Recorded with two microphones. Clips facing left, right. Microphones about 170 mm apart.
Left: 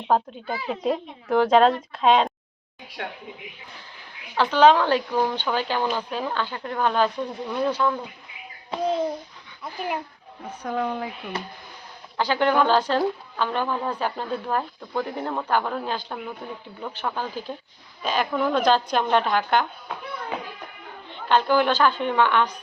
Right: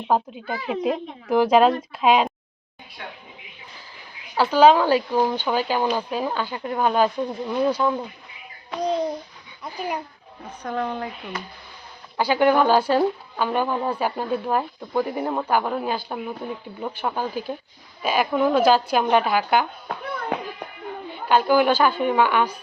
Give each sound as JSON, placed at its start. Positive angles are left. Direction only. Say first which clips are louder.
{"t": 0.1, "sound": "speech", "louder": "even", "side_deg": -10}
{"t": 3.0, "sound": "a woman's voice", "louder": "left 4 dB", "side_deg": 70}
{"t": 4.4, "sound": "speech", "louder": "right 2 dB", "side_deg": -10}
{"t": 8.8, "sound": "babbling", "louder": "right 1 dB", "side_deg": 5}
{"t": 10.6, "sound": "speech", "louder": "even", "side_deg": 10}
{"t": 12.1, "sound": "speech", "louder": "right 3 dB", "side_deg": -10}
{"t": 21.1, "sound": "speech", "louder": "right 2 dB", "side_deg": -10}